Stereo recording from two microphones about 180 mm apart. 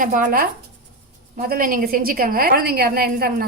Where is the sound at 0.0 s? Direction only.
50° right (ahead or behind).